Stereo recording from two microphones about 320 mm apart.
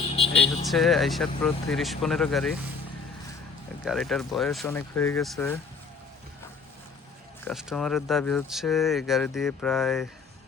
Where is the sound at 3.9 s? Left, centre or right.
Centre.